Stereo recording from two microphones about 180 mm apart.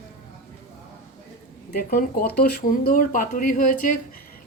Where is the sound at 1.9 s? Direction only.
55° left (ahead or behind).